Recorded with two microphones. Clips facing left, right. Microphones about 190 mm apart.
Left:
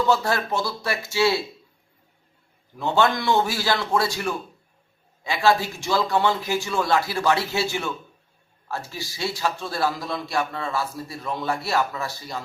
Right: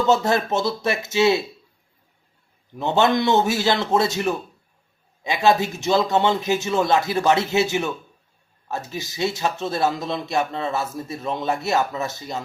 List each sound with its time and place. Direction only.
0.1 s speech: 20° right (ahead or behind)
2.7 s speech: 20° right (ahead or behind)